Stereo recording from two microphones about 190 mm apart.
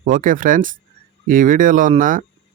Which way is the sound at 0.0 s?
45° right (ahead or behind).